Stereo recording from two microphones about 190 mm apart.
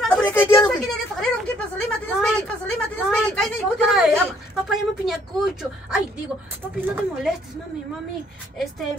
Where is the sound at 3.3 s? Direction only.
5° left (ahead or behind).